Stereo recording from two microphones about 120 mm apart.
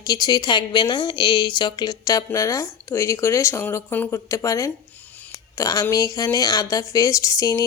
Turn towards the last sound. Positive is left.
turn(degrees=30)  # may be behind; listen again after turning